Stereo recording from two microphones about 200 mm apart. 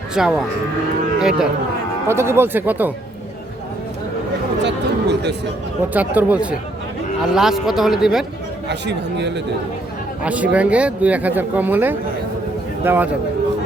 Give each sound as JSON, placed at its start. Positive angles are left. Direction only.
{"t": 0.1, "sound": "speech", "side_deg": -5}
{"t": 4.6, "sound": "speech", "side_deg": -55}
{"t": 5.9, "sound": "speech", "side_deg": -10}
{"t": 8.7, "sound": "speech", "side_deg": -60}
{"t": 10.2, "sound": "a man's voice", "side_deg": -5}